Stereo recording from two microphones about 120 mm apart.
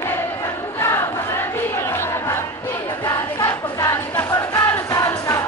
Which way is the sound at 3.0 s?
30° left (ahead or behind).